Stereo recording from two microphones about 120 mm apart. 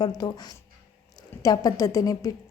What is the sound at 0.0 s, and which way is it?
A woman's voice, 35° left (ahead or behind).